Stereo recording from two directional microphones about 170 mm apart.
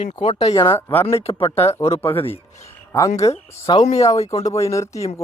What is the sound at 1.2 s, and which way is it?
Speech, 35° left (ahead or behind).